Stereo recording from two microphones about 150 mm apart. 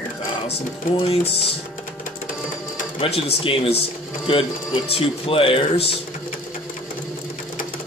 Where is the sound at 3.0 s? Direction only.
40° left (ahead or behind).